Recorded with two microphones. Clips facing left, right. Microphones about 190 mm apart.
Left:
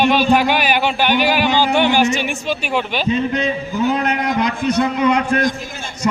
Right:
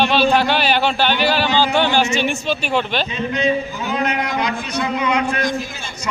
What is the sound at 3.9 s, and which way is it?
A man's voice, 50° left (ahead or behind).